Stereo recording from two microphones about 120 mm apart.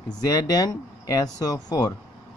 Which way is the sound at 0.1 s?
35° left (ahead or behind).